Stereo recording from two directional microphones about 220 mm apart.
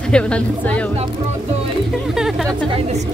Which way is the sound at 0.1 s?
5° left (ahead or behind).